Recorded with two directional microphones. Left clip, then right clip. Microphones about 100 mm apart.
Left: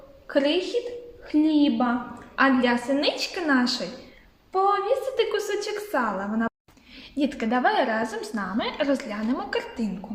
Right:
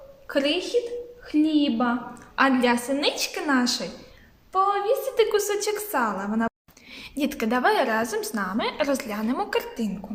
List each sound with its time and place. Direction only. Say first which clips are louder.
0.3 s a woman's voice: left 1 dB; 45° right (ahead or behind)
6.9 s a woman's voice: left 1 dB; 70° right (ahead or behind)